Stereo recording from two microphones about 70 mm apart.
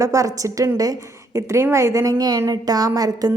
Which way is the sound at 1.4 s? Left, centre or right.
Right.